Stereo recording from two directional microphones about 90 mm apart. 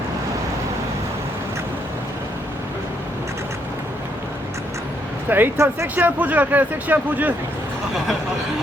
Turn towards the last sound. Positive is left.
turn(degrees=-20)  # may be behind; listen again after turning